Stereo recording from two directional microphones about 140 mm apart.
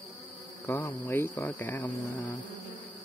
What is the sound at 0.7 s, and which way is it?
Insect, 20° left (ahead or behind).